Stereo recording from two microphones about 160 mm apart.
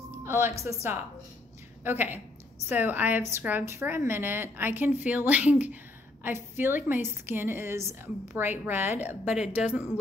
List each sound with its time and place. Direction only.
0.2 s a woman's voice: 15° right (ahead or behind)
1.9 s a woman's voice: 10° right (ahead or behind)